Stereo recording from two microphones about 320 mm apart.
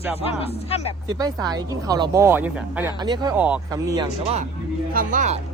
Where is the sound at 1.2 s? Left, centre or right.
Centre.